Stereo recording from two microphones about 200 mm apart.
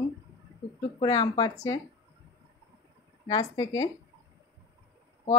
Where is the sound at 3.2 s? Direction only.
20° left (ahead or behind).